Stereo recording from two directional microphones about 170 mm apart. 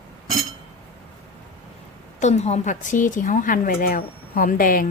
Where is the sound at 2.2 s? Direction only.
40° left (ahead or behind).